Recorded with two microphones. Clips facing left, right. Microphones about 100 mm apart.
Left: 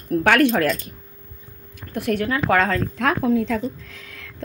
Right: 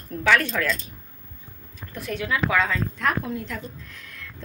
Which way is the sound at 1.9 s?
60° left (ahead or behind).